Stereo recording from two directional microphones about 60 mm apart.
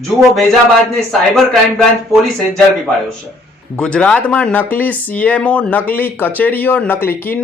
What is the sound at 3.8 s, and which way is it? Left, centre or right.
Speech, centre.